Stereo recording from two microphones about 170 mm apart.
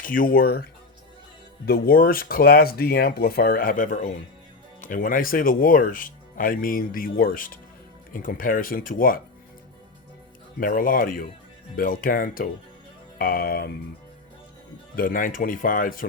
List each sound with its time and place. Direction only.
0.0 s speech: 55° left (ahead or behind)
1.6 s speech: 60° left (ahead or behind)
10.6 s speech: 55° left (ahead or behind)
14.9 s speech: 55° left (ahead or behind)